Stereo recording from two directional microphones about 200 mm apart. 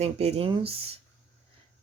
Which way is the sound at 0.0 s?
30° right (ahead or behind).